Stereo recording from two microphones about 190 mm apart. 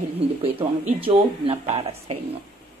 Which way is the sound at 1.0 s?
30° right (ahead or behind).